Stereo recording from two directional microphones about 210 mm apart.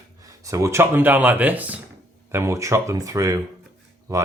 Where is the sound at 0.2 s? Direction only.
15° right (ahead or behind).